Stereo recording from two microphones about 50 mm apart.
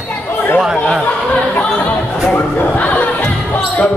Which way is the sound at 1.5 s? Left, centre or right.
Left.